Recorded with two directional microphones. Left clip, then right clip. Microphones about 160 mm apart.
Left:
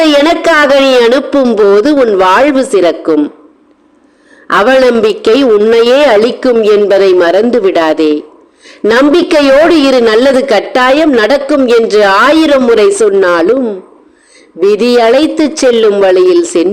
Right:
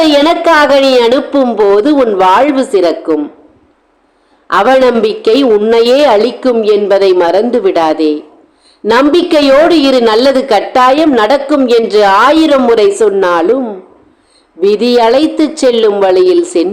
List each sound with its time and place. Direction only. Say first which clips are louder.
0.0 s a man's voice: left 1 dB; 30° left (ahead or behind)
4.5 s a man's voice: left 1 dB; 30° left (ahead or behind)